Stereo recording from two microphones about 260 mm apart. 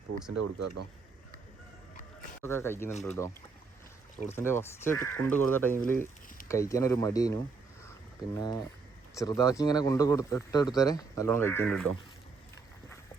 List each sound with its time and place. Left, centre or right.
0.3 s speech: right
2.4 s speech: centre
4.3 s speech: centre
7.9 s a sound: centre
9.1 s speech: centre